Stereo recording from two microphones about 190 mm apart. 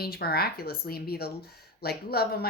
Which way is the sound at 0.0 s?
55° left (ahead or behind).